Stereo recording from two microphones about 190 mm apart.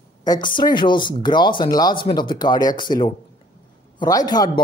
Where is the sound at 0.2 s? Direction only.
20° left (ahead or behind).